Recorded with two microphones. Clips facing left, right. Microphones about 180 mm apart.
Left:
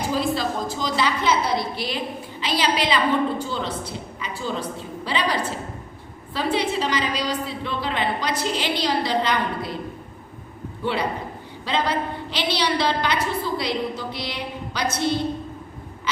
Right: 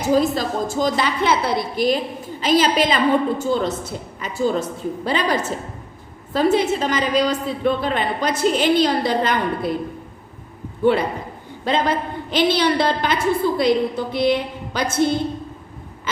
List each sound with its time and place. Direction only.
0.1 s a woman's voice: 45° right (ahead or behind)
11.6 s a woman's voice: 50° right (ahead or behind)